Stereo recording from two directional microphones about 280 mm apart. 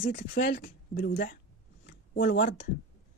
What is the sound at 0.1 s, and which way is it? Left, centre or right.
Speech, left.